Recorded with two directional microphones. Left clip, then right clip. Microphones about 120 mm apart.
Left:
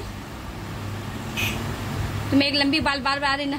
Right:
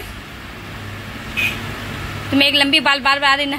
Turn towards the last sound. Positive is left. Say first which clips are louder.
# right 8 dB
turn(degrees=-15)  # may be behind; listen again after turning